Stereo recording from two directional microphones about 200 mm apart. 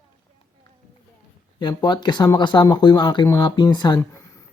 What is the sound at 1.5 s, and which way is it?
Speech, 20° left (ahead or behind).